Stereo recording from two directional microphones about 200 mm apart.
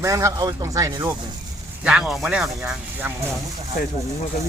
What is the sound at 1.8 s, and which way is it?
Speech, 5° right (ahead or behind).